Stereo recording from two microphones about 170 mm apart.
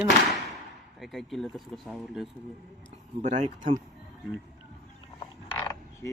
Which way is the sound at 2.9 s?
40° right (ahead or behind).